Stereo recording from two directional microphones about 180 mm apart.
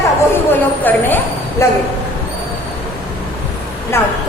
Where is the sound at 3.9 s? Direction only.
15° left (ahead or behind).